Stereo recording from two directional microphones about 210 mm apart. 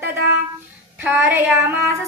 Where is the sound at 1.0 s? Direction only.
10° right (ahead or behind).